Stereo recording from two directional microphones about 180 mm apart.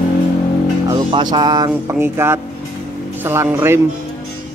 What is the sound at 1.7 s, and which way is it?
Speech, 15° right (ahead or behind).